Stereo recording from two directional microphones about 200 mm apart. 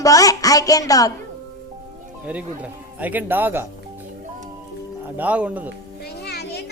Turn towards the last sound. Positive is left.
turn(degrees=55)  # may be behind; listen again after turning